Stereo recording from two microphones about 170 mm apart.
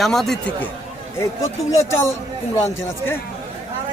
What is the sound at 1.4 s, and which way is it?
Speech, 20° left (ahead or behind).